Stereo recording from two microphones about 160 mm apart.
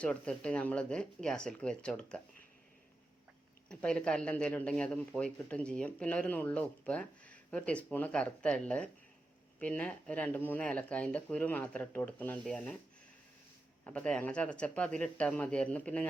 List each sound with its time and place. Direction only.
0.0 s speech: 5° left (ahead or behind)
3.7 s speech: 5° left (ahead or behind)
13.8 s speech: 10° left (ahead or behind)